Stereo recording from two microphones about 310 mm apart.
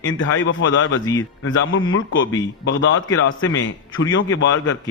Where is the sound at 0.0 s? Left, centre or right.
Left.